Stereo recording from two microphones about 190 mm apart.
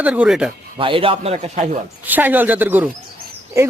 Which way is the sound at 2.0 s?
10° right (ahead or behind).